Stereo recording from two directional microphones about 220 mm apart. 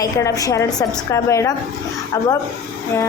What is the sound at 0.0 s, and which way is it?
A woman's voice, 15° left (ahead or behind).